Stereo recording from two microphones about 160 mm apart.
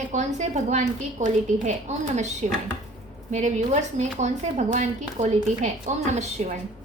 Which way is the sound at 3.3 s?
45° right (ahead or behind).